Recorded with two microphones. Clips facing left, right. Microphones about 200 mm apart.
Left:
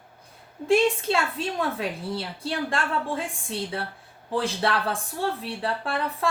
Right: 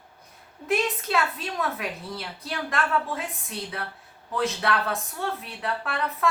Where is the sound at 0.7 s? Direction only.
30° left (ahead or behind).